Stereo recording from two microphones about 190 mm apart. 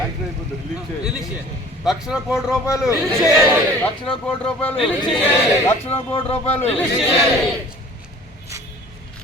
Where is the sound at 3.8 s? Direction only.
5° left (ahead or behind).